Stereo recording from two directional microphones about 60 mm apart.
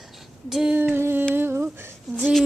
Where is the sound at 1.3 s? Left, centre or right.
Right.